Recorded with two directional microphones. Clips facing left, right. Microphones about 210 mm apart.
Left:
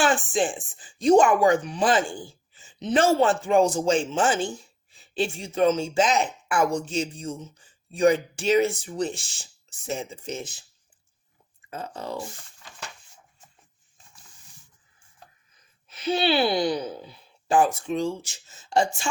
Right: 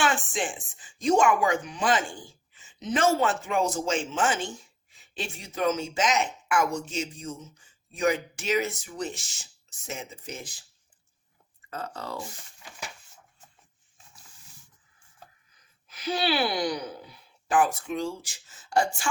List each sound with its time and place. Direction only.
0.0 s speech: 30° left (ahead or behind)
11.7 s speech: 20° left (ahead or behind)
15.9 s speech: 25° left (ahead or behind)